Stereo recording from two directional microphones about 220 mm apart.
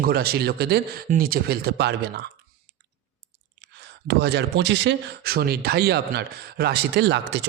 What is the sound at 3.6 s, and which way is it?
Speech, 50° right (ahead or behind).